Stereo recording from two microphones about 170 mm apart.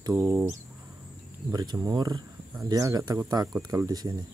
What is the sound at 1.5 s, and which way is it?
Speech, 25° right (ahead or behind).